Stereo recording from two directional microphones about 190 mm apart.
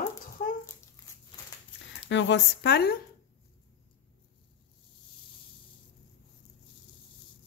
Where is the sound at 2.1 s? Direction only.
70° left (ahead or behind).